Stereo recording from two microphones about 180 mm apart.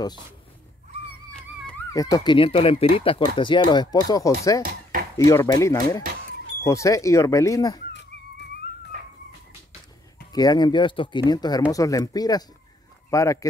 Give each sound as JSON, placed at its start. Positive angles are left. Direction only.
{"t": 1.9, "sound": "speech", "side_deg": 20}
{"t": 10.3, "sound": "speech", "side_deg": 20}